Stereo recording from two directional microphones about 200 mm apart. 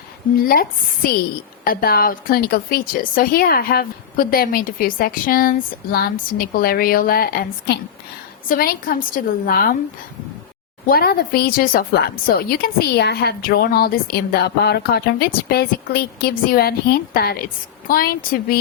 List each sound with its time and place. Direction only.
0.4 s a woman's voice: 45° left (ahead or behind)
10.8 s a woman's voice: 50° left (ahead or behind)